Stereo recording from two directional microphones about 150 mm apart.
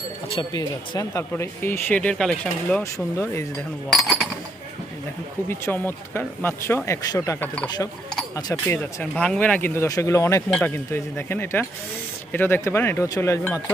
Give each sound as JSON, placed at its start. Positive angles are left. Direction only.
{"t": 0.3, "sound": "speech", "side_deg": 25}
{"t": 1.3, "sound": "speech", "side_deg": 15}
{"t": 5.5, "sound": "speech", "side_deg": 15}
{"t": 8.6, "sound": "speech", "side_deg": 15}